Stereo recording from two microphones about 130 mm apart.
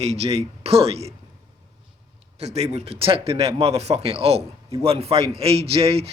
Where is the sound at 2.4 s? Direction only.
55° right (ahead or behind).